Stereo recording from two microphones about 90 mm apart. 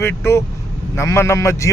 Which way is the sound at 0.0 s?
30° left (ahead or behind).